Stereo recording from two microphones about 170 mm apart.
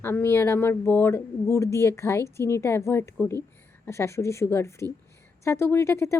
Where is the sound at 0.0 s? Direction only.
15° left (ahead or behind).